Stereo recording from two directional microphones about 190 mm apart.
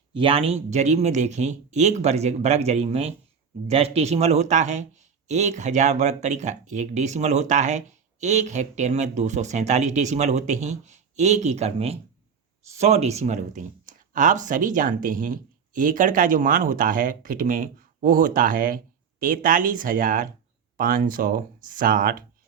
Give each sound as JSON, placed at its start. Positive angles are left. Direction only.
{"t": 0.1, "sound": "speech", "side_deg": -30}